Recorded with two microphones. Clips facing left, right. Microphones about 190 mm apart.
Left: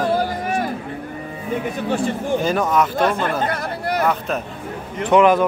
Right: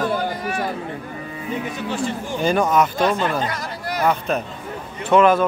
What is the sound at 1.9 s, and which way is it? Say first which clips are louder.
Speech: left 6 dB; 55° left (ahead or behind).